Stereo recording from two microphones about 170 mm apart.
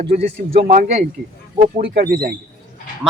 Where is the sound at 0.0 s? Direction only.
35° right (ahead or behind).